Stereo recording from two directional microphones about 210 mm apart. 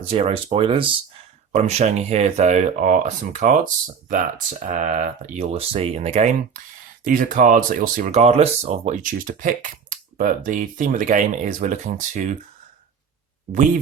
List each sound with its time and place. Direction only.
0.0 s speech: 25° right (ahead or behind)